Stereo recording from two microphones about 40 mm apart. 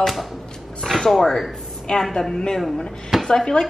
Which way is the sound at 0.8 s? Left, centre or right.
Centre.